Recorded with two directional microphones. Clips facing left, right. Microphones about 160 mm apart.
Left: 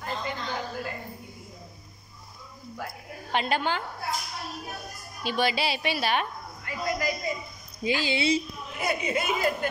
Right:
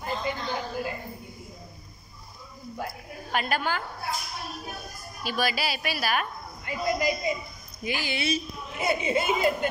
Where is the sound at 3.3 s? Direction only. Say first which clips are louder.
Left 1 dB; 20° left (ahead or behind).